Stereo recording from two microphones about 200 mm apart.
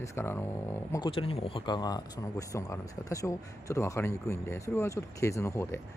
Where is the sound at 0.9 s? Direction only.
25° left (ahead or behind).